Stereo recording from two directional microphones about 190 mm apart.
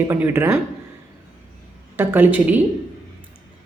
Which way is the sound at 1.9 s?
10° right (ahead or behind).